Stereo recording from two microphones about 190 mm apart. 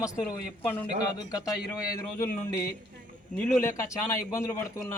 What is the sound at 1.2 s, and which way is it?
Speech, 20° left (ahead or behind).